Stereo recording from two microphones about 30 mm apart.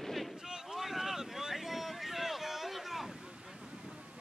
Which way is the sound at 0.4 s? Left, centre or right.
Centre.